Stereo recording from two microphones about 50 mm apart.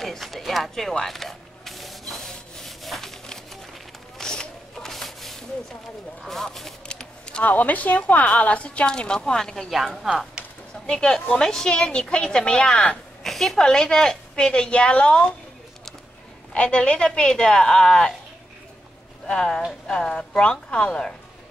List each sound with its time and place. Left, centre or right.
0.0 s mechanisms: centre
4.2 s a sound: centre
6.2 s a woman's voice: centre
6.9 s typing: centre
7.4 s a woman's voice: left; by 9.7 s centre
9.7 s a woman's voice: centre
10.4 s a sound: centre
10.9 s a woman's voice: centre
13.2 s a sound: centre
13.6 s a woman's voice: centre
16.5 s a woman's voice: left
19.2 s a woman's voice: centre